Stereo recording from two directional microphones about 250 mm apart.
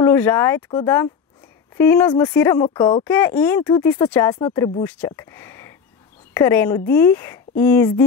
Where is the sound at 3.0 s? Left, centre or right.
Centre.